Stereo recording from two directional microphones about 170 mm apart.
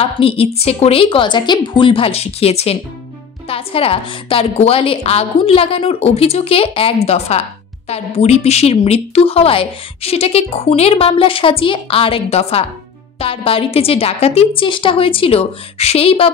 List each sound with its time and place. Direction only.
0.0 s a woman's voice: 35° left (ahead or behind)